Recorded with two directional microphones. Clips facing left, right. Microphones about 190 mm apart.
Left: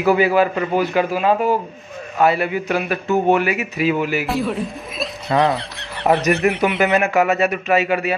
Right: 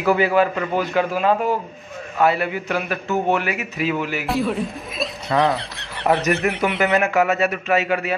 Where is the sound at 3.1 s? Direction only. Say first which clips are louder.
Left 4 dB; 15° left (ahead or behind).